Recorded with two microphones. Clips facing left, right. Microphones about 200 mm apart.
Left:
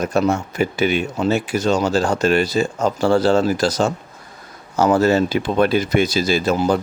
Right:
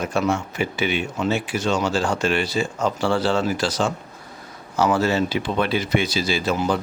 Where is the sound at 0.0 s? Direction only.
40° left (ahead or behind).